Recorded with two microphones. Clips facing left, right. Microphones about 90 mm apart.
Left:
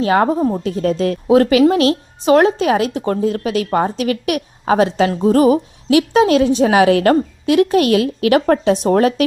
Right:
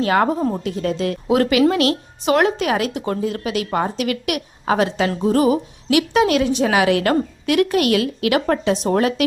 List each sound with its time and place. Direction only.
0.0 s a woman's voice: 30° left (ahead or behind)
0.3 s a woman's voice: 10° left (ahead or behind)
0.6 s a woman's voice: 40° left (ahead or behind)